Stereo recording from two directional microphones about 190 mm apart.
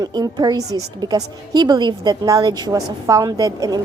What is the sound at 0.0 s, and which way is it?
A woman's voice, 20° right (ahead or behind).